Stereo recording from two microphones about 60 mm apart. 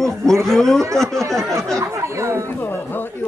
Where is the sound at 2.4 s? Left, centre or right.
Left.